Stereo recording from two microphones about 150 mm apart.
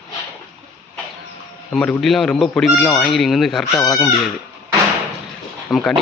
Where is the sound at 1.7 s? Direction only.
5° left (ahead or behind).